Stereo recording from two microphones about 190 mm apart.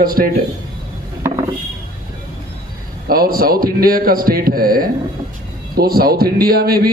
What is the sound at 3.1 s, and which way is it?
Speech, 50° right (ahead or behind).